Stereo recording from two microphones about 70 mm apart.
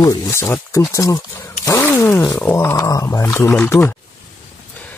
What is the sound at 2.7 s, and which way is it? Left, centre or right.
Speech, left.